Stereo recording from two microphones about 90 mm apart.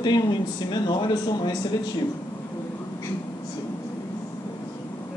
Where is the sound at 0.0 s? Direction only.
55° left (ahead or behind).